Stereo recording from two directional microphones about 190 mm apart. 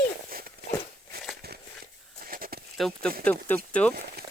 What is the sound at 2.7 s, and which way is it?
Speech, centre (ahead or behind).